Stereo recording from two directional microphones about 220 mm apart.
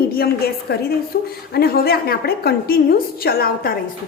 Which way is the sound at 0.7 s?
45° left (ahead or behind).